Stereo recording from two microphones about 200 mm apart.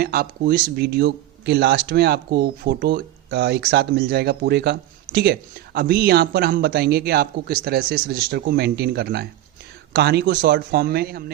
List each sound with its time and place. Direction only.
0.0 s speech: 50° right (ahead or behind)